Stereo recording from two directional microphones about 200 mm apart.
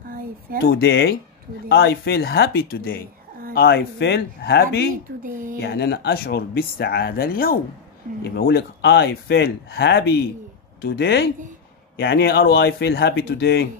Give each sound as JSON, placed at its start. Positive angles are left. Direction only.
{"t": 0.7, "sound": "speech", "side_deg": 55}